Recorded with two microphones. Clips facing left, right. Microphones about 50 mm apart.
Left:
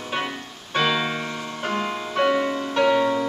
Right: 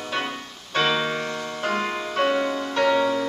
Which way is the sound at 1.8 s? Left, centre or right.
Centre.